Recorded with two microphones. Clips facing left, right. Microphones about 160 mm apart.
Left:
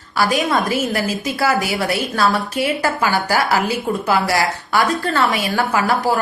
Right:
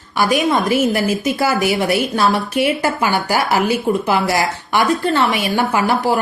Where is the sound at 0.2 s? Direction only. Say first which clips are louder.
Right 2 dB; 20° right (ahead or behind).